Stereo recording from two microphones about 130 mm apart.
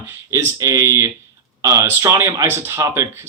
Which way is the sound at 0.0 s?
20° right (ahead or behind).